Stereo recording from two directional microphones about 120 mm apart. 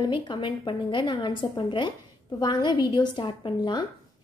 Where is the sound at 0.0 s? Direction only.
45° left (ahead or behind).